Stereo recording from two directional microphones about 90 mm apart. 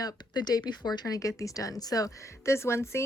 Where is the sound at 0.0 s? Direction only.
50° left (ahead or behind).